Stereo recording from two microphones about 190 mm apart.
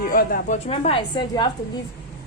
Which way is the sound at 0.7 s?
30° left (ahead or behind).